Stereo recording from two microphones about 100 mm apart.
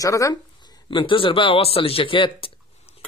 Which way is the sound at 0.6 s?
50° left (ahead or behind).